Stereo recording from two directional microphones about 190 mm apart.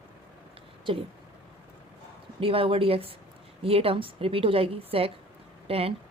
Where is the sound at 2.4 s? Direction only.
30° right (ahead or behind).